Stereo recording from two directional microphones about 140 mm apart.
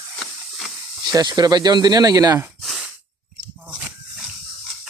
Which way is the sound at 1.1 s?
30° right (ahead or behind).